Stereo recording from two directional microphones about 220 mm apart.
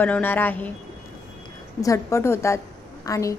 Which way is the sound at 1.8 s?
15° left (ahead or behind).